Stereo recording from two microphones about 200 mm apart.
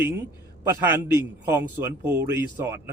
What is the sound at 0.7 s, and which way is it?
A man's voice, 10° right (ahead or behind).